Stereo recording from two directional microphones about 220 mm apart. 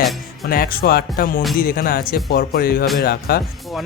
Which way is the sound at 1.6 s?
40° left (ahead or behind).